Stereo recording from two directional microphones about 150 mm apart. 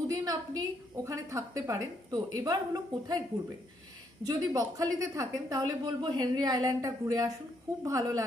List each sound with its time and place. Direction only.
0.1 s a woman's voice: 25° right (ahead or behind)
4.2 s a woman's voice: 25° right (ahead or behind)